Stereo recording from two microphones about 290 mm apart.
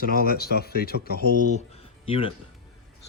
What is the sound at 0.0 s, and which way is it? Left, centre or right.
Speech, left.